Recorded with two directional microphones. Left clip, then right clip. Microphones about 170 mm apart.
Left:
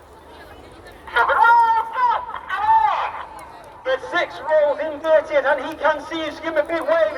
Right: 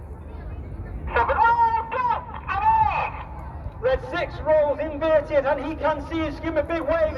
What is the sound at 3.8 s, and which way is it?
A man's voice, 40° right (ahead or behind).